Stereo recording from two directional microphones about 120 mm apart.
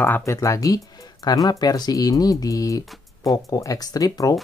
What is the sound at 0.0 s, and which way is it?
Speech, 20° left (ahead or behind).